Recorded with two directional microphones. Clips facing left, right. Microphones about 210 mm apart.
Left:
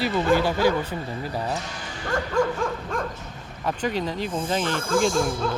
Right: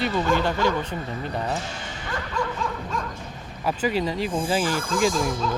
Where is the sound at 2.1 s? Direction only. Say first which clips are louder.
Left 6 dB; 50° left (ahead or behind).